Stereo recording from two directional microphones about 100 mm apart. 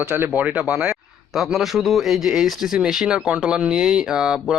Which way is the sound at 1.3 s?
Centre (ahead or behind).